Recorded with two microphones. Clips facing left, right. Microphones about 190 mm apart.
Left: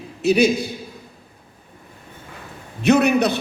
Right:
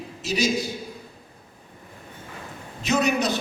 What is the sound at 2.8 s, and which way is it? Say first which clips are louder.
Speech: left 7 dB; 60° left (ahead or behind).